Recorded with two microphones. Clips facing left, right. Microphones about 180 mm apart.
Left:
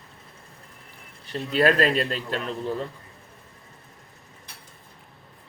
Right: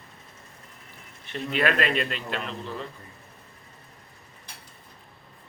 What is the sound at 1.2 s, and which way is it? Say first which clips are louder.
A man's voice: left 4 dB; 35° left (ahead or behind).